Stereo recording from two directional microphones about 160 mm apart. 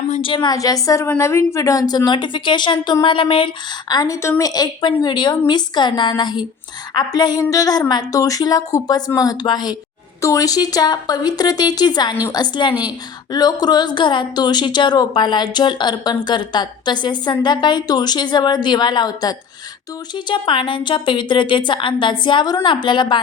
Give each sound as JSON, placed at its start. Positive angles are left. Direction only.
{"t": 0.2, "sound": "a woman's voice", "side_deg": 30}